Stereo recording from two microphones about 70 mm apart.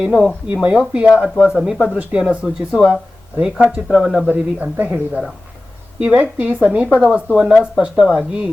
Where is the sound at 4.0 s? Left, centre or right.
Centre.